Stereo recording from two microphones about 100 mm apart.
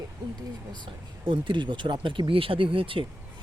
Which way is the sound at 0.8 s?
60° right (ahead or behind).